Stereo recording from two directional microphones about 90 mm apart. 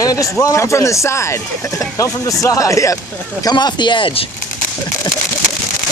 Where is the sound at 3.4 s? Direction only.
50° left (ahead or behind); by 4.2 s 65° left (ahead or behind).